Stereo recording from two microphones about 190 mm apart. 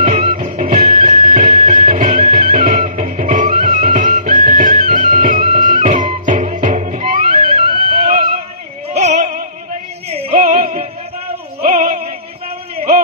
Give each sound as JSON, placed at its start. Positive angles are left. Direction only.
{"t": 0.0, "sound": "music", "side_deg": -35}
{"t": 8.9, "sound": "opera", "side_deg": -35}
{"t": 10.0, "sound": "music", "side_deg": -30}
{"t": 11.6, "sound": "opera", "side_deg": -45}